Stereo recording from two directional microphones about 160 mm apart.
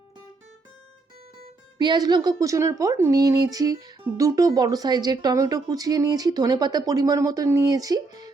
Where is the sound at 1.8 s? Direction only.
25° right (ahead or behind).